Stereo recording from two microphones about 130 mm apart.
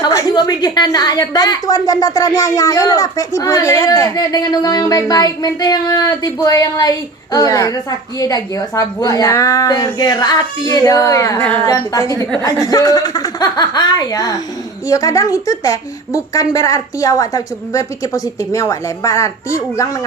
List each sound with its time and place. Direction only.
0.0 s a woman's voice: 25° left (ahead or behind)